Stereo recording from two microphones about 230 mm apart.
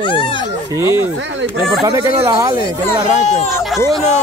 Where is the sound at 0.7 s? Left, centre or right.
Centre.